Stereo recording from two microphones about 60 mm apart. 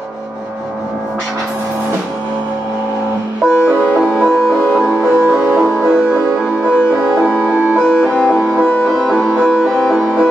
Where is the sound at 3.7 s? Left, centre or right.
Right.